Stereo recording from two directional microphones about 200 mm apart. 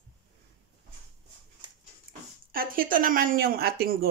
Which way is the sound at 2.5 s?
45° right (ahead or behind).